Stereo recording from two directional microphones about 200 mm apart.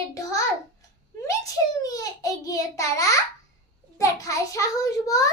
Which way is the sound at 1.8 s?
15° left (ahead or behind).